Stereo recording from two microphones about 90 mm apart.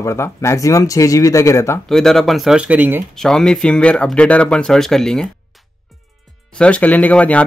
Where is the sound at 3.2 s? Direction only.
5° left (ahead or behind).